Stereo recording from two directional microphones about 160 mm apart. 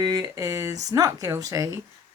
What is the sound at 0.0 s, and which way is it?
Speech, 25° right (ahead or behind).